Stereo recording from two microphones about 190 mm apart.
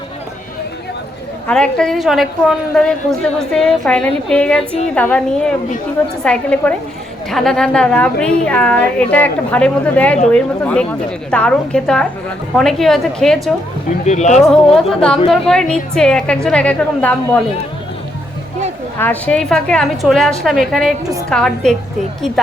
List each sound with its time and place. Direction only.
1.5 s a woman's voice: 5° left (ahead or behind)
14.0 s speech: 40° left (ahead or behind)
14.4 s a woman's voice: 5° left (ahead or behind)
18.9 s a woman's voice: 10° left (ahead or behind)
21.0 s a woman's voice: 15° right (ahead or behind)
21.2 s a woman's voice: 5° left (ahead or behind)